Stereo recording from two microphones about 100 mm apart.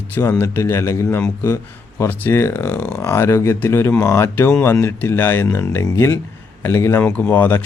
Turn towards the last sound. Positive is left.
turn(degrees=15)  # may be behind; listen again after turning